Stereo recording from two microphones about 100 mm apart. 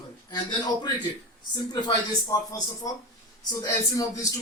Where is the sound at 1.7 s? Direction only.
35° left (ahead or behind).